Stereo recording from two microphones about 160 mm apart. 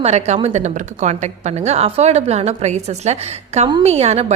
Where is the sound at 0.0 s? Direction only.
45° right (ahead or behind).